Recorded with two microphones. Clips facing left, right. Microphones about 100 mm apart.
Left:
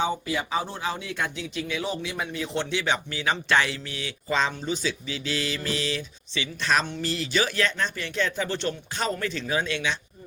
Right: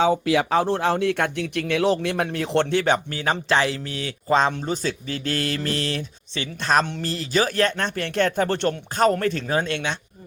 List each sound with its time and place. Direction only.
0.0 s speech: 90° right; by 3.4 s 45° right (ahead or behind)
3.5 s speech: 35° right (ahead or behind); by 10.0 s 55° right (ahead or behind)